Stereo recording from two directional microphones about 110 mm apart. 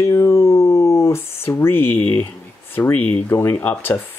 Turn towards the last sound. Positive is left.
turn(degrees=15)  # may be behind; listen again after turning